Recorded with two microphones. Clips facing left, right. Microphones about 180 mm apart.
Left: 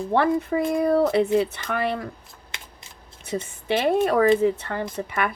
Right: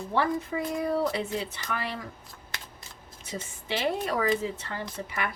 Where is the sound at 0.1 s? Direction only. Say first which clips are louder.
Left 6 dB; 60° left (ahead or behind).